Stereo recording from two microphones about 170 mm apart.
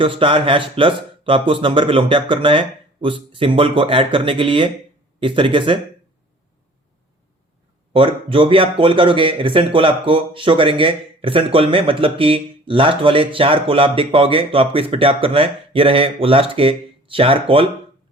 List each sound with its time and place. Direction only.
0.0 s speech: 30° right (ahead or behind)
7.9 s speech: 30° right (ahead or behind)